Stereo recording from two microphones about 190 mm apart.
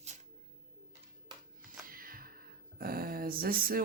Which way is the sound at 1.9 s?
50° right (ahead or behind).